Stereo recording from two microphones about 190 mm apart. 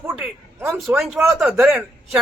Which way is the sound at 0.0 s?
15° right (ahead or behind).